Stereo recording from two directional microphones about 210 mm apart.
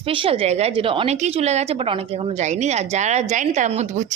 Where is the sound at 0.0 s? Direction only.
25° right (ahead or behind).